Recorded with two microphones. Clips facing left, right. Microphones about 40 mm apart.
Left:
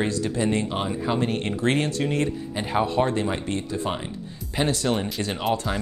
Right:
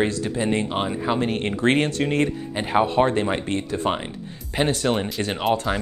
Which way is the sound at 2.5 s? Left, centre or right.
Right.